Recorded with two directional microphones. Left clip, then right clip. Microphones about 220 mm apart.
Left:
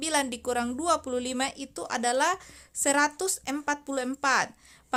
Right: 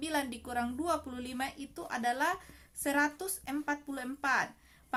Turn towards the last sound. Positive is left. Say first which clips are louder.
# left 6 dB
turn(degrees=40)  # may be behind; listen again after turning